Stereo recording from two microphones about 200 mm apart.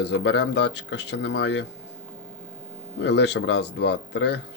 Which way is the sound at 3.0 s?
60° left (ahead or behind).